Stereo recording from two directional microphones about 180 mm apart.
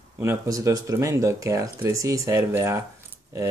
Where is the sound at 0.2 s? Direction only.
15° right (ahead or behind).